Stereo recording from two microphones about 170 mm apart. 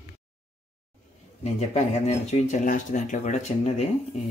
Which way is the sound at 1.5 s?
40° left (ahead or behind).